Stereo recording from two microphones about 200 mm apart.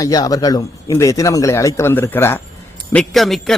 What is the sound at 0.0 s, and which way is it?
A man's voice, 20° left (ahead or behind).